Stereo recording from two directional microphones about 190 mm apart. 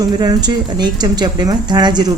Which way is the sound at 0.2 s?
20° right (ahead or behind).